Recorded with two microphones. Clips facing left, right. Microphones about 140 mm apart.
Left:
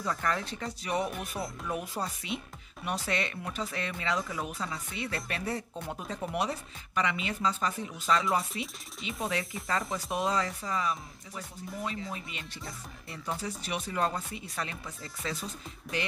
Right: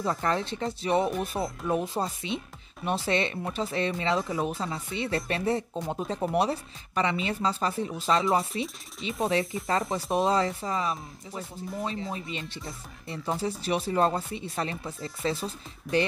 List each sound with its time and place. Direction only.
0.0 s speech: 30° right (ahead or behind)